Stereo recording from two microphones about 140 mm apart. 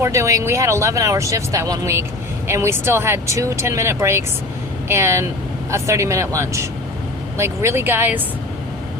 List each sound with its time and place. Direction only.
0.0 s speech: 20° right (ahead or behind)